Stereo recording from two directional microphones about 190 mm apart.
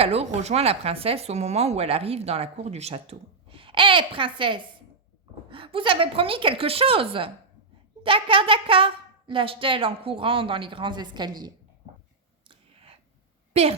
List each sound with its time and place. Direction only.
0.0 s a woman's voice: 35° right (ahead or behind)
12.5 s a sound: 30° right (ahead or behind)
13.5 s a child's voice: 35° right (ahead or behind)